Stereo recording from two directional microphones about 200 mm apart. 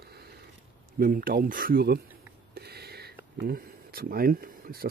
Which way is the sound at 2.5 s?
55° right (ahead or behind).